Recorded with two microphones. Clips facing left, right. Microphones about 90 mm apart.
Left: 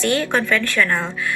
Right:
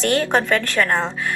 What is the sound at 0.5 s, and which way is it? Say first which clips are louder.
Speech: even; 35° right (ahead or behind).